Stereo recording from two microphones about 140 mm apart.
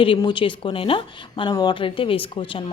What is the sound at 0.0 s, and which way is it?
A woman's voice, 35° left (ahead or behind).